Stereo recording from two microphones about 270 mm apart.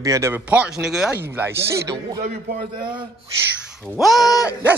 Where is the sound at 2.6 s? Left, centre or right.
Centre.